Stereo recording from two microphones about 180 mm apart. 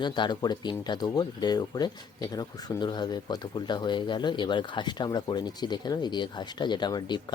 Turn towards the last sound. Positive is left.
turn(degrees=25)  # may be behind; listen again after turning